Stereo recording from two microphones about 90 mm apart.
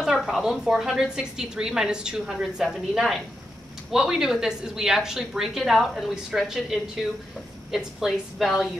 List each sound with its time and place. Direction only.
0.0 s a woman's voice: 5° right (ahead or behind)